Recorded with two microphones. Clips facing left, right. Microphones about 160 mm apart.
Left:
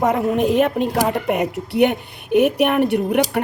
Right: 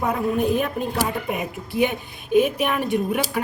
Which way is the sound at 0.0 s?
80° left.